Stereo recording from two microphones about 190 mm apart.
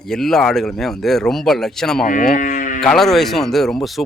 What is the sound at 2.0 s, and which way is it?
Speech, 45° left (ahead or behind).